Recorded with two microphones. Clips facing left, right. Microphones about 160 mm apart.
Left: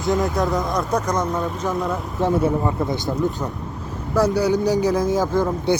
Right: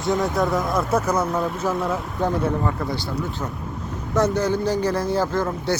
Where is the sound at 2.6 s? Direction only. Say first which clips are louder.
Left 3 dB; 20° left (ahead or behind).